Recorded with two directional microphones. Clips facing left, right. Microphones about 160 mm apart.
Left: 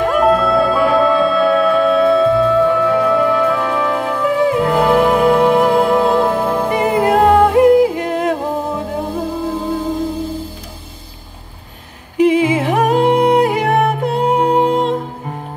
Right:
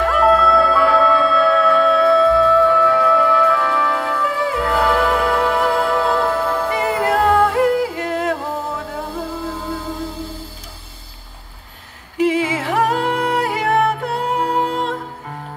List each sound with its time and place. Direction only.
0.0 s music: 20° left (ahead or behind)
12.2 s music: 15° left (ahead or behind)